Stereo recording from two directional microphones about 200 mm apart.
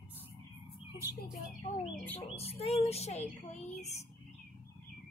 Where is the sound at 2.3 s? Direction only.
30° left (ahead or behind).